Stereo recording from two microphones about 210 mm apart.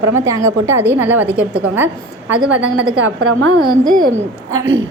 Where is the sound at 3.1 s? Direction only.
75° right (ahead or behind).